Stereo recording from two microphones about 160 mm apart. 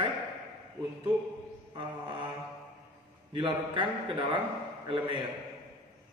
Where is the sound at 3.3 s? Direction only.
30° right (ahead or behind).